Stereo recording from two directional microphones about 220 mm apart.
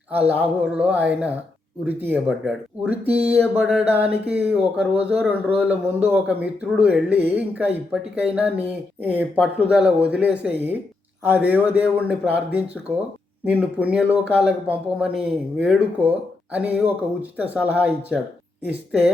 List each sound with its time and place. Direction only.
0.1 s speech: 5° right (ahead or behind)